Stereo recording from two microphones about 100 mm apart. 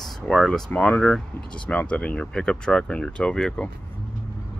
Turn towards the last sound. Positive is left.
turn(degrees=5)  # may be behind; listen again after turning